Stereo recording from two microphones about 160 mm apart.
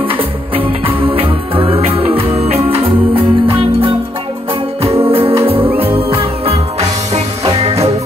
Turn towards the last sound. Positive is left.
turn(degrees=-40)  # may be behind; listen again after turning